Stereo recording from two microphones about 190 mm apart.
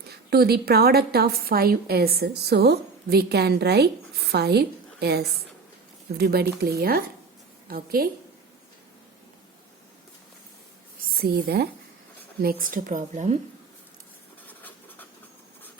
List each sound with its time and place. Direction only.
0.1 s a woman's voice: 55° right (ahead or behind)
11.2 s speech: 50° right (ahead or behind)
14.4 s a sound: 10° left (ahead or behind)